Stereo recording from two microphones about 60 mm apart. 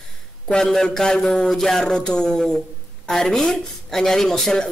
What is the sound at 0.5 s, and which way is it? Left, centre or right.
Speech, centre.